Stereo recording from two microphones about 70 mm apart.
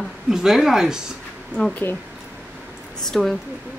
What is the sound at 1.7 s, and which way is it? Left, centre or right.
Speech, left.